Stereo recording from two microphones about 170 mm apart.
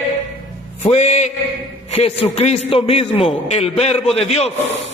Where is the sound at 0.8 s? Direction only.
40° left (ahead or behind).